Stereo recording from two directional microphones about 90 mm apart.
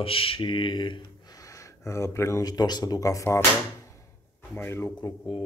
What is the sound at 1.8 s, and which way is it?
Speech, 35° left (ahead or behind).